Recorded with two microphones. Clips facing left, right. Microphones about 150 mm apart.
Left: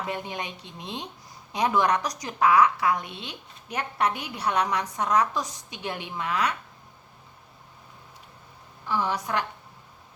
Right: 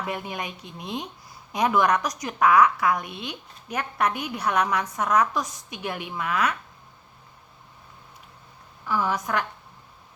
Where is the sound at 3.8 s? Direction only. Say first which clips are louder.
Right 1 dB; 30° left (ahead or behind).